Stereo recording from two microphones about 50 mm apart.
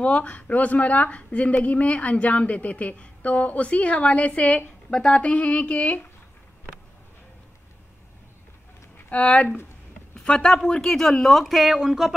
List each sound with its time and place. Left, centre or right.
0.0 s speech: left
4.9 s speech: centre
5.2 s speech: left
8.9 s speech: left; by 12.1 s centre